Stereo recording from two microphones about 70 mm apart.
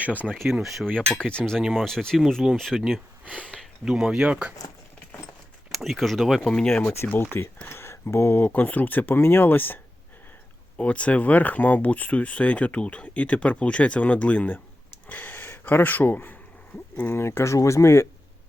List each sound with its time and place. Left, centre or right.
0.4 s speech: centre
1.1 s speech: centre
1.5 s speech: centre
3.2 s speech: centre
5.7 s speech: centre
6.4 s speech: centre
7.0 s speech: left
10.8 s speech: centre; by 18.1 s left